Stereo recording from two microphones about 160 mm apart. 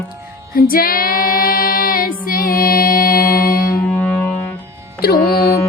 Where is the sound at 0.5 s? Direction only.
65° left (ahead or behind).